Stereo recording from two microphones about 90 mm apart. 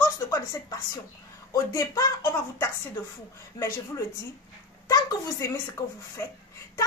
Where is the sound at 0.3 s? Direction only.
40° left (ahead or behind).